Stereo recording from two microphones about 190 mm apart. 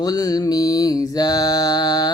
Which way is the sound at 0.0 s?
20° left (ahead or behind).